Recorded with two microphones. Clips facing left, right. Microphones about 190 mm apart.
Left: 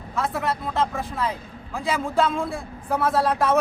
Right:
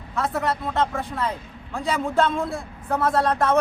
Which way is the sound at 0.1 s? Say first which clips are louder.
Right 1 dB; centre (ahead or behind).